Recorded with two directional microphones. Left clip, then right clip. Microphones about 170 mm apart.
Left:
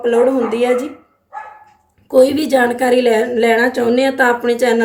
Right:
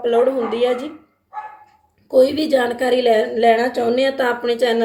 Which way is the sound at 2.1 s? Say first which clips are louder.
Left 3 dB; 45° left (ahead or behind).